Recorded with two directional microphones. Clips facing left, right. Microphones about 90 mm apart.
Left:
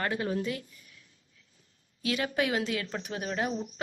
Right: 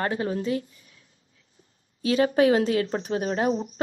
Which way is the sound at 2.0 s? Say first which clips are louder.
Right 10 dB; 35° right (ahead or behind).